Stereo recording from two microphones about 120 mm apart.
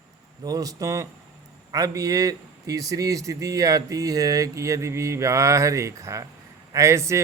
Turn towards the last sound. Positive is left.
turn(degrees=-25)  # may be behind; listen again after turning